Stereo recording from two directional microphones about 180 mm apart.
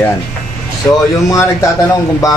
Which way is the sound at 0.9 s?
10° left (ahead or behind).